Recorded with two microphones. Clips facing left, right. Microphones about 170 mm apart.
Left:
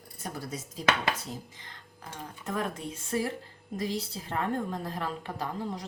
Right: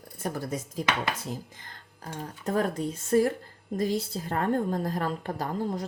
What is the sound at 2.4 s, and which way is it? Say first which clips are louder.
A woman's voice: right 6 dB; 35° right (ahead or behind).